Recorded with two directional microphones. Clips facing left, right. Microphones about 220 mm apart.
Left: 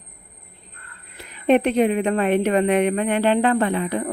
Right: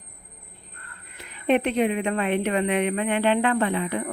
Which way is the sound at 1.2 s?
40° left (ahead or behind).